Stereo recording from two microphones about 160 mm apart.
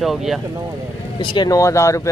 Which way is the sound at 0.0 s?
Centre (ahead or behind).